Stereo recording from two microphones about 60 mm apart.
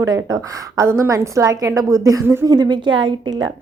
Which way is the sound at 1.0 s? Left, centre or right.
Right.